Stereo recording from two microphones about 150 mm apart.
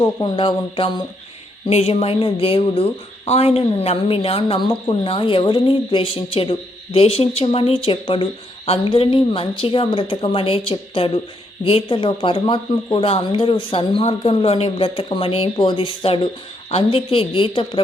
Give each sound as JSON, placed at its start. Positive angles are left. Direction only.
{"t": 0.0, "sound": "speech", "side_deg": 35}